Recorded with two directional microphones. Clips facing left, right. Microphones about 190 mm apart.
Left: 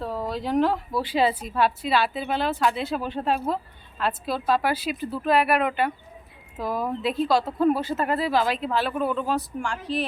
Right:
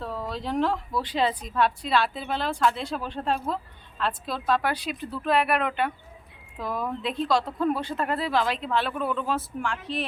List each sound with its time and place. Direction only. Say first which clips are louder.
0.3 s speech: left 3 dB; 5° left (ahead or behind)